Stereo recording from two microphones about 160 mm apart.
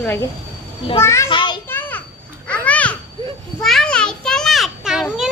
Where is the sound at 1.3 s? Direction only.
30° left (ahead or behind).